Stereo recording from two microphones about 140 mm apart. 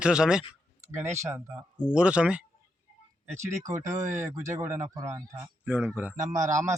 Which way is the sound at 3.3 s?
20° right (ahead or behind).